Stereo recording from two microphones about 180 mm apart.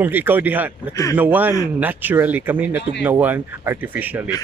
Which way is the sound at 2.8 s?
70° left (ahead or behind).